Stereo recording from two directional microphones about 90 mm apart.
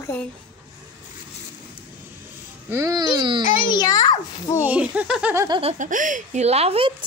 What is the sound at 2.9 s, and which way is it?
Speech, 55° right (ahead or behind).